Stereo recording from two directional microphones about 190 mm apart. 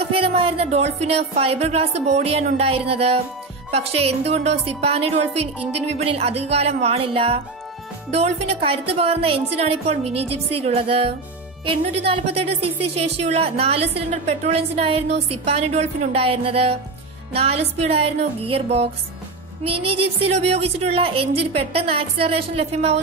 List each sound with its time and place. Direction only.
0.0 s a woman's voice: 30° right (ahead or behind)